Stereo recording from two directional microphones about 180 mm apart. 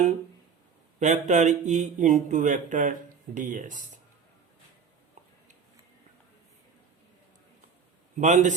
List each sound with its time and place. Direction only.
0.9 s speech: 40° right (ahead or behind)
8.2 s speech: 45° right (ahead or behind)